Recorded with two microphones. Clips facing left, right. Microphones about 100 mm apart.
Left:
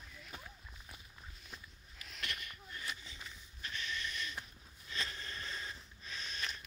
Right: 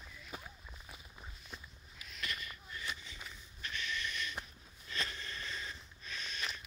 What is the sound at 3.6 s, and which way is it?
Snort, 30° left (ahead or behind).